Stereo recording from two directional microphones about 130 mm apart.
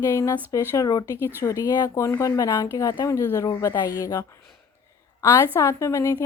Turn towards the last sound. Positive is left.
turn(degrees=25)  # may be behind; listen again after turning